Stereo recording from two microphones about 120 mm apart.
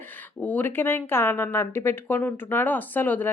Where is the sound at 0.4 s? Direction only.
15° left (ahead or behind).